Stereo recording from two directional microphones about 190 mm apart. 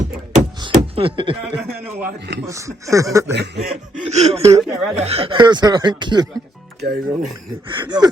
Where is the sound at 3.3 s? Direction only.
65° right (ahead or behind).